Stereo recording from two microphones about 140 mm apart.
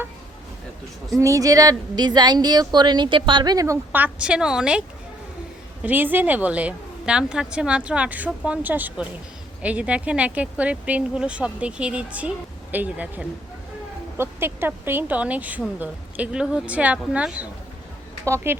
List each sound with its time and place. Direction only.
1.2 s speech: 25° right (ahead or behind)
3.9 s a woman's voice: 10° right (ahead or behind)
5.8 s a woman's voice: 15° right (ahead or behind)